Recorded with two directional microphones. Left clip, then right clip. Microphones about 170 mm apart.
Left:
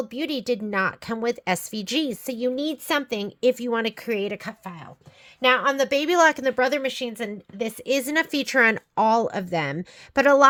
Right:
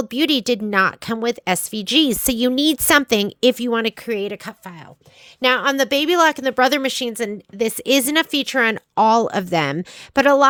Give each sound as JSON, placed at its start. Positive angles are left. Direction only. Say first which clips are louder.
{"t": 0.0, "sound": "a woman's voice", "louder": "right 9 dB", "side_deg": -50}
{"t": 2.0, "sound": "a woman's voice", "louder": "right 7 dB", "side_deg": -50}
{"t": 5.5, "sound": "a woman's voice", "louder": "right 4 dB", "side_deg": -55}
{"t": 6.1, "sound": "a woman's voice", "louder": "even", "side_deg": -30}
{"t": 6.6, "sound": "a woman's voice", "louder": "right 6 dB", "side_deg": -60}
{"t": 8.1, "sound": "a woman's voice", "louder": "right 3 dB", "side_deg": -25}
{"t": 10.2, "sound": "a woman's voice", "louder": "right 2 dB", "side_deg": -20}